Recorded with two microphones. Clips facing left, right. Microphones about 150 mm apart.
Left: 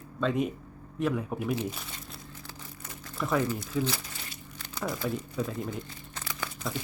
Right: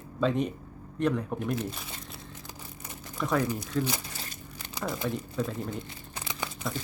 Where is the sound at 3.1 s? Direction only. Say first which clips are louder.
Even; 5° left (ahead or behind).